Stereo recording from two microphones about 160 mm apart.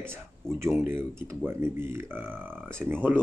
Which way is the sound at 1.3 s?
15° right (ahead or behind).